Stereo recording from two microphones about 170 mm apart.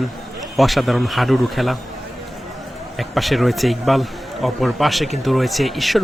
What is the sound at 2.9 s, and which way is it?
Speech, centre (ahead or behind).